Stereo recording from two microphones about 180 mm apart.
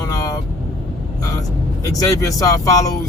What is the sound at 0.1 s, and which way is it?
Vehicle, 20° left (ahead or behind).